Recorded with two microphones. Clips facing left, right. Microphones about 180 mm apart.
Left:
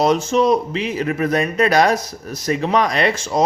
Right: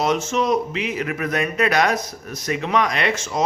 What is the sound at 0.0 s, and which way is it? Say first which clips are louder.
Speech: left 5 dB; 35° left (ahead or behind).